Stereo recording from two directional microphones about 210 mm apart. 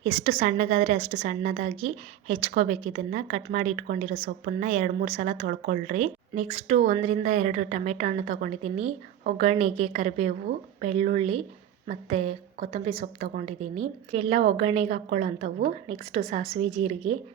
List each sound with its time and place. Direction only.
0.0 s a woman's voice: 30° right (ahead or behind)